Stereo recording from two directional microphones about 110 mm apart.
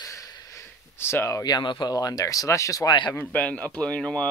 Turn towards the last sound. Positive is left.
turn(degrees=10)  # may be behind; listen again after turning